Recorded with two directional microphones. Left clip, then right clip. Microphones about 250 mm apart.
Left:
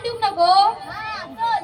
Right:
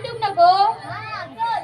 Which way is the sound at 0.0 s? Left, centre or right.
Left.